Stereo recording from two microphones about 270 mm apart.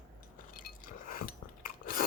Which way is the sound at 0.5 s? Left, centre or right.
Left.